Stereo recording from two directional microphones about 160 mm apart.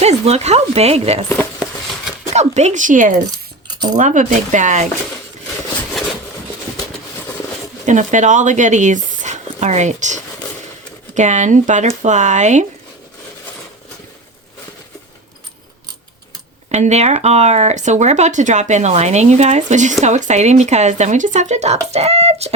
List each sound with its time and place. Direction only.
0.0 s speech: 40° right (ahead or behind)
1.3 s speech: 15° left (ahead or behind)
2.3 s speech: 45° right (ahead or behind)
7.9 s speech: 50° right (ahead or behind)
16.7 s speech: 45° right (ahead or behind)
21.9 s a sound: 40° right (ahead or behind)